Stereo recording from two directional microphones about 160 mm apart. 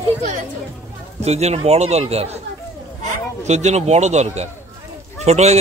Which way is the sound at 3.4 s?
45° right (ahead or behind).